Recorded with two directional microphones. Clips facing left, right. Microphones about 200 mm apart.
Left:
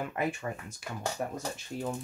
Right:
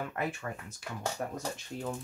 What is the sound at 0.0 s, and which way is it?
Speech, 15° left (ahead or behind).